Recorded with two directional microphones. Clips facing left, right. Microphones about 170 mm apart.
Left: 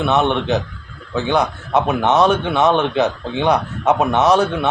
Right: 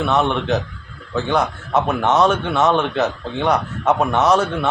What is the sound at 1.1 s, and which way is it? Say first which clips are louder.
A man's voice: left 1 dB; centre (ahead or behind).